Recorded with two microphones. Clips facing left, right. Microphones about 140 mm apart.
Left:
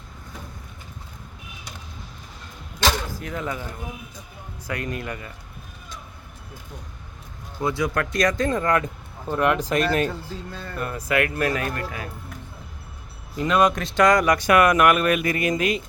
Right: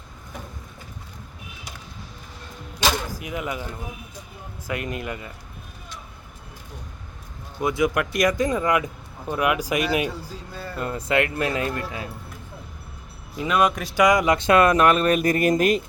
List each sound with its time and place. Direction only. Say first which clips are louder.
2.8 s a sound: even; 10° right (ahead or behind)
4.7 s speech: right 1 dB; 20° right (ahead or behind)
7.6 s speech: right 2 dB; 20° right (ahead or behind)
10.8 s speech: right 1 dB; 25° right (ahead or behind)
13.3 s speech: left 2 dB; 5° right (ahead or behind); by 15.8 s 45° right (ahead or behind)